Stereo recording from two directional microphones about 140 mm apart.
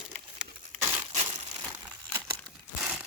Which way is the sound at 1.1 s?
55° right (ahead or behind).